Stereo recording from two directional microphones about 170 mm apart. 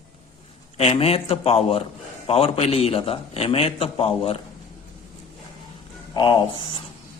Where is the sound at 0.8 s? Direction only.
35° left (ahead or behind).